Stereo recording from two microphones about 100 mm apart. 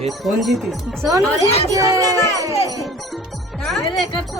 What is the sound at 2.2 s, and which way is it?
Speech, 30° left (ahead or behind).